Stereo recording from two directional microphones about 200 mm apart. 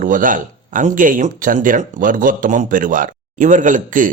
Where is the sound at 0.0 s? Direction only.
40° right (ahead or behind).